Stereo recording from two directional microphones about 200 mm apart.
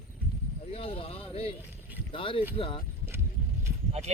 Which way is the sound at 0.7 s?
30° left (ahead or behind).